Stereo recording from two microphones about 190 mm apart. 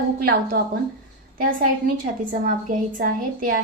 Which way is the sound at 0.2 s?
55° right (ahead or behind).